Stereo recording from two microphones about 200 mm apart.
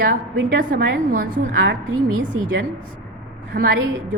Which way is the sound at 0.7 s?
40° right (ahead or behind).